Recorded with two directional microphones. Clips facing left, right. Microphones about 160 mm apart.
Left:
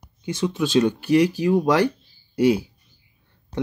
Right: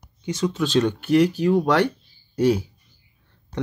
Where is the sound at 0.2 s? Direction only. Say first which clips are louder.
Even; 10° left (ahead or behind).